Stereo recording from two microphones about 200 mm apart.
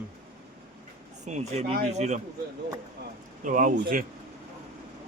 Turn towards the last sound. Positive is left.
turn(degrees=-45)  # may be behind; listen again after turning